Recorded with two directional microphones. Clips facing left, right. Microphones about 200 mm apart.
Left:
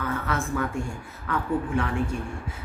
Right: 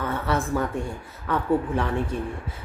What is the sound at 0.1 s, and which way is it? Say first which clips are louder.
Speech: right 4 dB; 35° right (ahead or behind).